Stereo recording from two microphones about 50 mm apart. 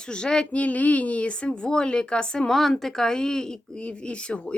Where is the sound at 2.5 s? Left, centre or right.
Centre; by 4.5 s left.